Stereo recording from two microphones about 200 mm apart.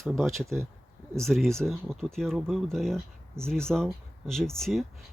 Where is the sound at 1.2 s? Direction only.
Centre (ahead or behind).